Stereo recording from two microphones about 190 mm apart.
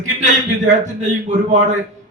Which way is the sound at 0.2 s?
40° right (ahead or behind).